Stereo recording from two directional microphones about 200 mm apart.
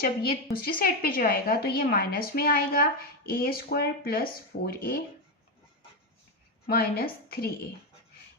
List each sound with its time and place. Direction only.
0.0 s a woman's voice: 50° left (ahead or behind)
6.7 s a woman's voice: 50° left (ahead or behind)